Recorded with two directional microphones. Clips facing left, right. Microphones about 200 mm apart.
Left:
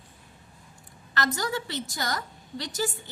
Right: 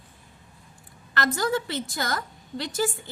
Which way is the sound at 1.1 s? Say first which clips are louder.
Right 4 dB; 55° right (ahead or behind).